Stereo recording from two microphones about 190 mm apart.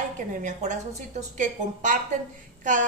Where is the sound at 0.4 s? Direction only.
40° right (ahead or behind).